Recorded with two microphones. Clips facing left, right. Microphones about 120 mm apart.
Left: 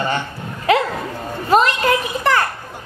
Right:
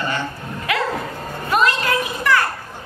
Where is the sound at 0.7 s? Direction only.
30° left (ahead or behind).